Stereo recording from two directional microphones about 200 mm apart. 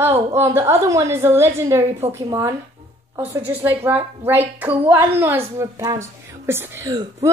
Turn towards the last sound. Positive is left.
turn(degrees=-15)  # may be behind; listen again after turning